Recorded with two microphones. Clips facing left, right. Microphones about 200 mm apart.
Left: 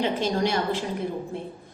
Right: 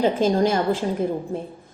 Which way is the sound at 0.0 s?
45° right (ahead or behind).